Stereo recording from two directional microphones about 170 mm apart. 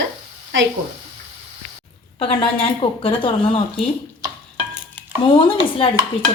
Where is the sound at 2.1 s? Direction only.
35° left (ahead or behind).